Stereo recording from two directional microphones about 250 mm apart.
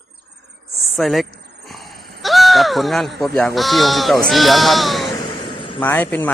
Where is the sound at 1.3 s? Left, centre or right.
Right.